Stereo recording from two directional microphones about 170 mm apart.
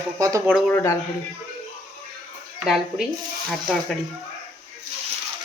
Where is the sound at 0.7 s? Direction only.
15° left (ahead or behind).